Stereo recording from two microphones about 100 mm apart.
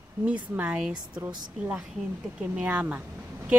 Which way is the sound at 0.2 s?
15° right (ahead or behind).